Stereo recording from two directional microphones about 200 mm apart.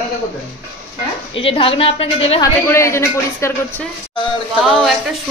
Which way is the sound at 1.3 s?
25° left (ahead or behind).